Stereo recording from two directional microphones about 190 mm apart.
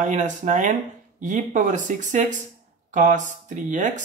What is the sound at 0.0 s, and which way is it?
Speech, 40° right (ahead or behind).